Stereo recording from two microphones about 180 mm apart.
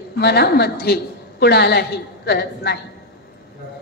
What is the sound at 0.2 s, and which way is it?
A woman's voice, 65° left (ahead or behind).